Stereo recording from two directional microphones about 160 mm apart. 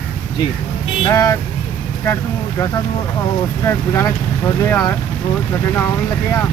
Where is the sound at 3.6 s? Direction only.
15° left (ahead or behind).